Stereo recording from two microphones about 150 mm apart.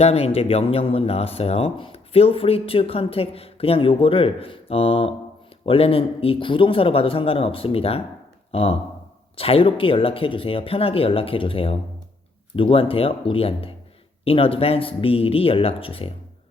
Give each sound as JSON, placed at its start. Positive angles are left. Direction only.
{"t": 0.0, "sound": "speech", "side_deg": 40}